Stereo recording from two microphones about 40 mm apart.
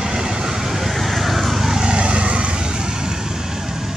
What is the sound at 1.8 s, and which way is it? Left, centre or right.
Vehicle, right.